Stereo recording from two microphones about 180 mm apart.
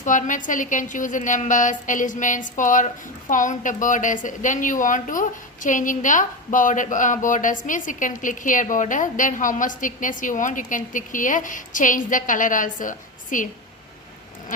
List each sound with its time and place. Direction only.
0.0 s a woman's voice: 45° left (ahead or behind)